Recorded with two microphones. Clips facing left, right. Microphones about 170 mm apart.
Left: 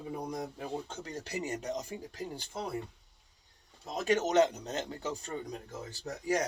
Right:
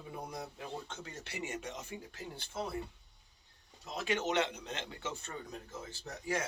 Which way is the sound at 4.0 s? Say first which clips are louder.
Left 7 dB; 40° left (ahead or behind).